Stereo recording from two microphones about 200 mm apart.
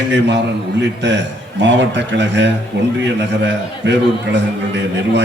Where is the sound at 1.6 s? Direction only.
65° right (ahead or behind).